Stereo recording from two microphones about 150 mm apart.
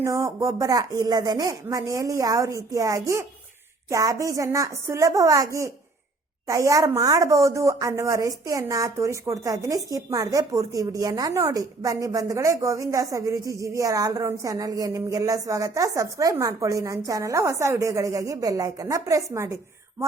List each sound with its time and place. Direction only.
0.0 s a woman's voice: 20° right (ahead or behind)